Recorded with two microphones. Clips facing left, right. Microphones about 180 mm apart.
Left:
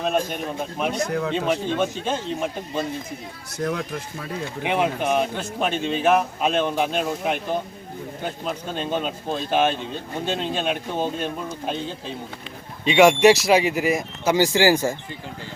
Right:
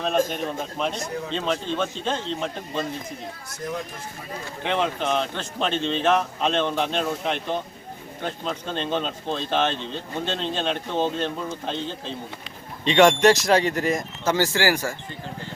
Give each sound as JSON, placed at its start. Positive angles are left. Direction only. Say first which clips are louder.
{"t": 0.9, "sound": "speech", "louder": "left 6 dB", "side_deg": 70}
{"t": 1.3, "sound": "speech", "louder": "left 3 dB", "side_deg": 10}
{"t": 3.6, "sound": "speech", "louder": "left 5 dB", "side_deg": 65}
{"t": 4.6, "sound": "speech", "louder": "left 2 dB", "side_deg": 10}